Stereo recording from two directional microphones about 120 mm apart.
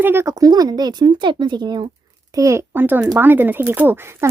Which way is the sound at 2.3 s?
25° right (ahead or behind).